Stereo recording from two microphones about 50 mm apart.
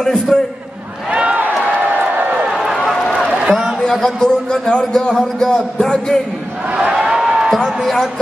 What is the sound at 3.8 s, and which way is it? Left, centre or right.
A man's voice, centre.